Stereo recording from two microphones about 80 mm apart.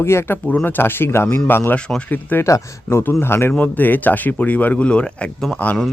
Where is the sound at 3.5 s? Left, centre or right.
Left.